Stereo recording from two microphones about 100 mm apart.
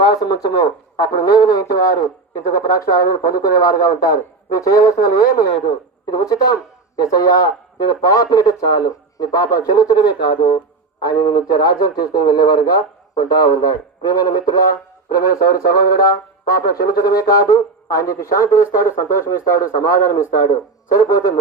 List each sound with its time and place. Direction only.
0.0 s a man's voice: 40° left (ahead or behind)
16.7 s speech: 40° left (ahead or behind)